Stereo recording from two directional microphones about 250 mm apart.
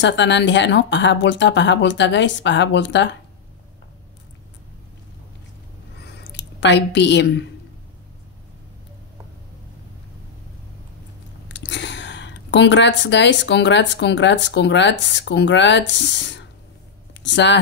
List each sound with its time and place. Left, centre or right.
0.0 s speech: left
6.0 s a sound: left
11.5 s speech: left